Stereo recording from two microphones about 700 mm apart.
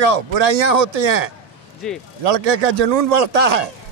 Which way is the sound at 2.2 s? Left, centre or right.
Right.